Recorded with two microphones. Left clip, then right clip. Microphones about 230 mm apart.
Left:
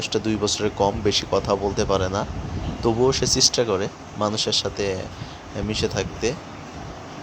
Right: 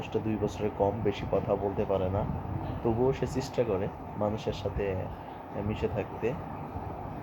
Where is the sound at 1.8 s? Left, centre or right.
Left.